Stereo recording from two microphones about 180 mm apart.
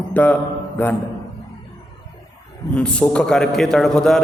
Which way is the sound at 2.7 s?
5° left (ahead or behind).